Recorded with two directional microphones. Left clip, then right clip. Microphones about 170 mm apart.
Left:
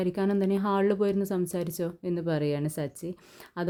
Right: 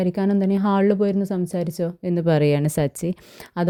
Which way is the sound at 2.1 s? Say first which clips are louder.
Right 11 dB; 40° right (ahead or behind).